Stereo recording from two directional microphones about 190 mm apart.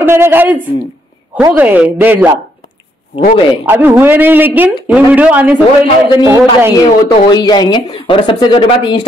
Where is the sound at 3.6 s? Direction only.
10° right (ahead or behind).